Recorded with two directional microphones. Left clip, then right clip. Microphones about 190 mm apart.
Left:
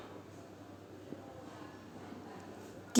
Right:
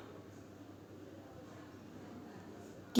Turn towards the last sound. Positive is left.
turn(degrees=10)  # may be behind; listen again after turning